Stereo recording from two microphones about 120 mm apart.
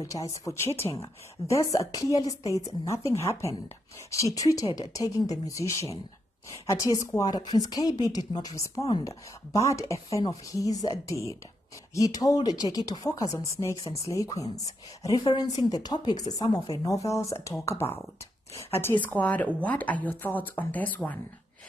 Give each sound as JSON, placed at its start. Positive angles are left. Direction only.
{"t": 0.0, "sound": "a woman's voice", "side_deg": 30}